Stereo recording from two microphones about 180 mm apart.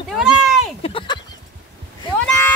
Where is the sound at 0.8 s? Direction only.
30° left (ahead or behind).